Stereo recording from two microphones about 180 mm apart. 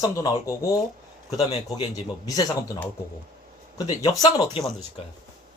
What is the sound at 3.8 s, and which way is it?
Speech, 20° left (ahead or behind).